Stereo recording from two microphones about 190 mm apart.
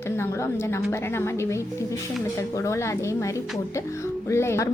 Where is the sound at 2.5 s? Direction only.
15° left (ahead or behind).